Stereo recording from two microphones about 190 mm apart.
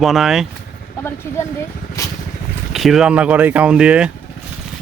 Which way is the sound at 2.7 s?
Centre (ahead or behind).